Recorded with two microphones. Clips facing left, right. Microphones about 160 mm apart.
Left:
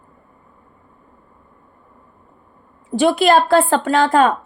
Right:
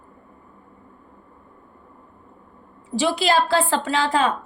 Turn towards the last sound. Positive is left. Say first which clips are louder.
# left 6 dB
turn(degrees=50)  # may be behind; listen again after turning